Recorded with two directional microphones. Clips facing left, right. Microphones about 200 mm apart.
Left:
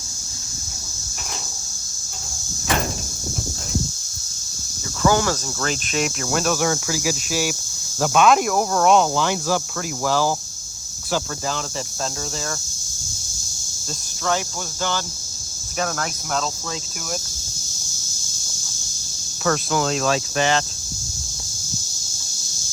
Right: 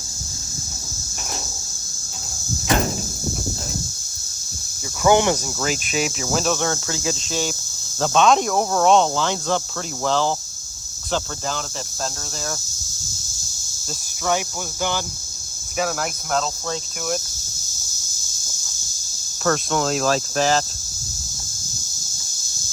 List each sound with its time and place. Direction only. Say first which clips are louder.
5.0 s speech: right 3 dB; 20° right (ahead or behind)
5.6 s speech: even; 5° right (ahead or behind)
15.8 s speech: right 2 dB; 5° right (ahead or behind)
19.5 s speech: even; centre (ahead or behind)